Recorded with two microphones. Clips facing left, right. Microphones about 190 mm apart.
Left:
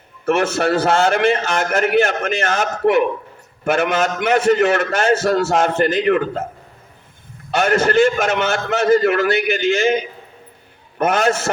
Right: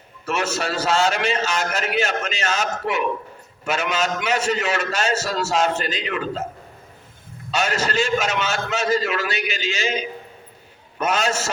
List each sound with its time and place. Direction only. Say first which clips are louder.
0.3 s a man's voice: left 8 dB; 55° left (ahead or behind)
7.5 s a man's voice: left 7 dB; 55° left (ahead or behind)